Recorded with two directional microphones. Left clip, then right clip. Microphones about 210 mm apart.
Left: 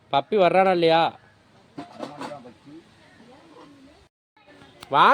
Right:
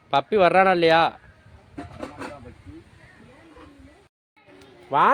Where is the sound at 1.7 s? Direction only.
35° left (ahead or behind).